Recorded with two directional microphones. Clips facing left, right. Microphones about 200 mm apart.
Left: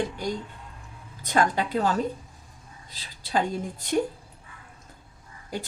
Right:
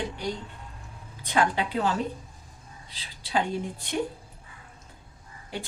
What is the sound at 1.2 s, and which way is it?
Speech, 45° left (ahead or behind).